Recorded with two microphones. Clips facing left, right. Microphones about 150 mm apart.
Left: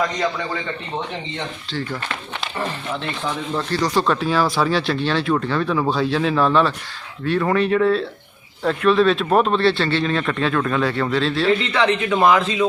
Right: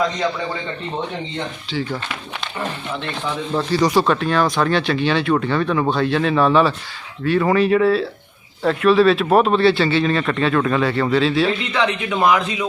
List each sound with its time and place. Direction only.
1.7 s speech: centre (ahead or behind)
3.5 s speech: 10° right (ahead or behind)
4.0 s speech: centre (ahead or behind)
11.8 s speech: 15° right (ahead or behind)